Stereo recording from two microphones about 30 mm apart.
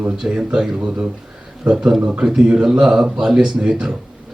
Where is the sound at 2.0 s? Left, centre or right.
Right.